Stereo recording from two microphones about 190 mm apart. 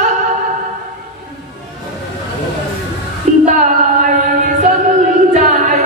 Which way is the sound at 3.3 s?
45° right (ahead or behind).